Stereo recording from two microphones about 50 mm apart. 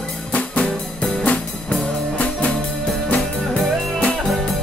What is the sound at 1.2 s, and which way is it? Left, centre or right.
Music, left.